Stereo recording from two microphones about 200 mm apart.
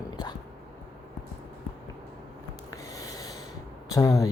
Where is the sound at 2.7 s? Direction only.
15° left (ahead or behind).